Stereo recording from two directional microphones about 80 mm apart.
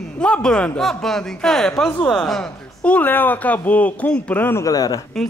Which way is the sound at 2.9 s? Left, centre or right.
Left.